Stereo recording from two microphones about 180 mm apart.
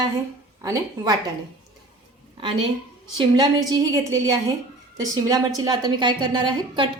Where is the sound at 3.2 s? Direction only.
20° right (ahead or behind).